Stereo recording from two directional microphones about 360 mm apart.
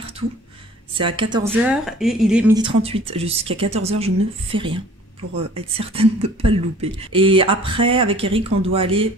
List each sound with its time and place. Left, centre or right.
0.9 s a woman's voice: centre